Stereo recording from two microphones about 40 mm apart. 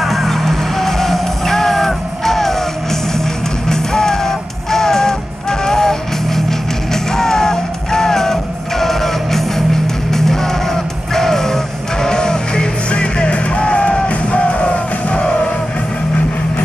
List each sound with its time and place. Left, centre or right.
0.0 s music: centre; by 15.3 s left